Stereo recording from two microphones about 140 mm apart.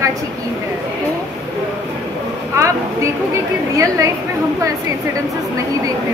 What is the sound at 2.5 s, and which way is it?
A woman's voice, 20° right (ahead or behind).